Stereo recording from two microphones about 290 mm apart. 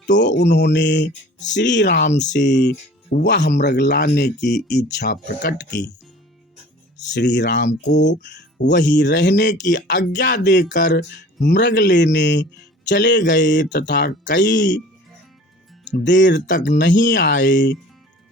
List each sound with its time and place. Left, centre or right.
0.0 s speech: left
7.1 s speech: left
8.0 s speech: left
16.0 s speech: left